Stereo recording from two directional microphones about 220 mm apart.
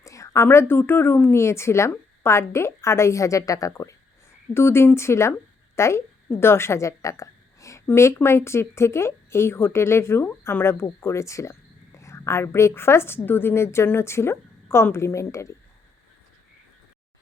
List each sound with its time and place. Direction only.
0.0 s a woman's voice: 15° left (ahead or behind)